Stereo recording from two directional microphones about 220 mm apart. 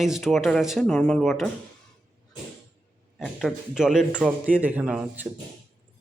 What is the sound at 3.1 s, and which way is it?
Speech, centre (ahead or behind).